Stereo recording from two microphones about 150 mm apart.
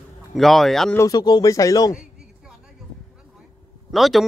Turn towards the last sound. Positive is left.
turn(degrees=0)  # may be behind; listen again after turning